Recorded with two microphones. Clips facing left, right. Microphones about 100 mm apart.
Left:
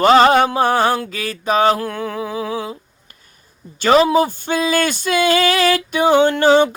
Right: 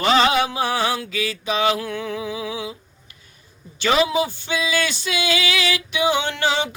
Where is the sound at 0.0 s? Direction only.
45° left (ahead or behind).